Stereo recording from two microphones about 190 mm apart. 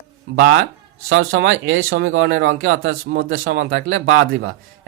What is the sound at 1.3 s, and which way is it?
Speech, 80° right.